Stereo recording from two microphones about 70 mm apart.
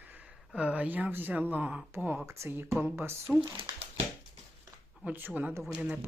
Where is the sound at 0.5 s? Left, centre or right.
Centre.